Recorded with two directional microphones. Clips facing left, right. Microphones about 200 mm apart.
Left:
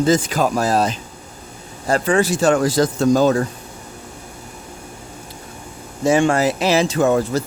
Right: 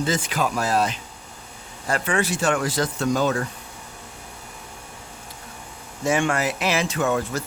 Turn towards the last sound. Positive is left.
turn(degrees=35)  # may be behind; listen again after turning